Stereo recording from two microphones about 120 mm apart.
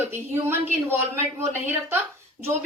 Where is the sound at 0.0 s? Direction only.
20° right (ahead or behind).